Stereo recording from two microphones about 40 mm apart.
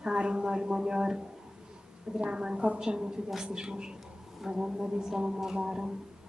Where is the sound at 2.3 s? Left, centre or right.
Right.